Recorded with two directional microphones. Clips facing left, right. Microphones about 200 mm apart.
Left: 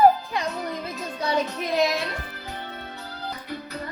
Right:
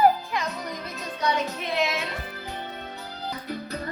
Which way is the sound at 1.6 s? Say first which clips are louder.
Left 4 dB; 40° left (ahead or behind).